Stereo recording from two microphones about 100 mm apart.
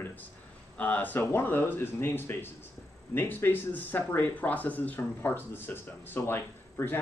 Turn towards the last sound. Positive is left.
turn(degrees=25)  # may be behind; listen again after turning